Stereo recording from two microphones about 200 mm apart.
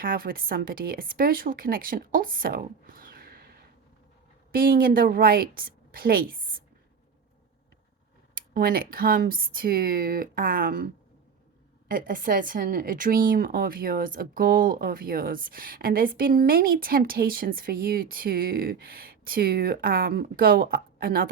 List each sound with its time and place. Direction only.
0.0 s a woman's voice: 45° right (ahead or behind)
8.4 s a woman's voice: 50° right (ahead or behind)
11.9 s a woman's voice: 45° right (ahead or behind)